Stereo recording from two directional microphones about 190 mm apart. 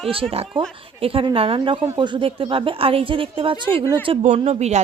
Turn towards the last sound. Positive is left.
turn(degrees=-35)  # may be behind; listen again after turning